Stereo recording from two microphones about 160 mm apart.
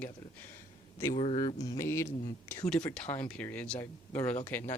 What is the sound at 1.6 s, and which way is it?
Speech, 20° left (ahead or behind).